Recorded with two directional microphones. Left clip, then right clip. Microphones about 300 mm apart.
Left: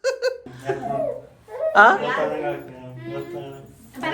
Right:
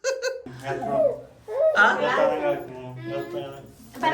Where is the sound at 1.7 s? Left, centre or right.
Centre.